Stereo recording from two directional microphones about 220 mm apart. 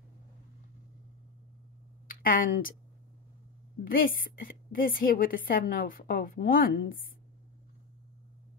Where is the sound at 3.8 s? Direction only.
40° left (ahead or behind).